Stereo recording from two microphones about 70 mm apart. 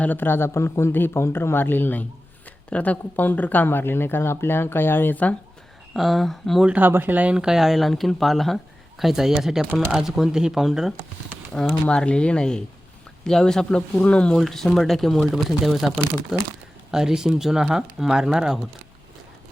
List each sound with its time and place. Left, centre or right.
0.0 s speech: left
5.9 s speech: centre
6.7 s speech: right
7.3 s speech: centre
11.6 s speech: centre
14.3 s speech: centre
16.9 s speech: centre